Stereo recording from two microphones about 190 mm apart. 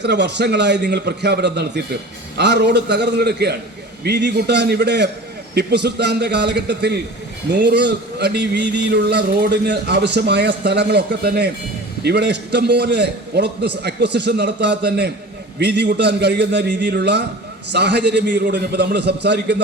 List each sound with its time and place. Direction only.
0.0 s speech: 65° right (ahead or behind)